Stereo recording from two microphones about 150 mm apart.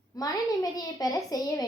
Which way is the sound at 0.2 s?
25° left (ahead or behind).